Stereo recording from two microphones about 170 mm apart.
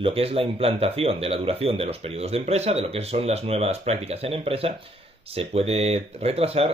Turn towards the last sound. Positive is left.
turn(degrees=-35)  # may be behind; listen again after turning